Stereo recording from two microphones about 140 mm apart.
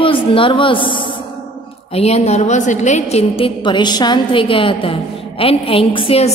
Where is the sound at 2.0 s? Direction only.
50° left (ahead or behind).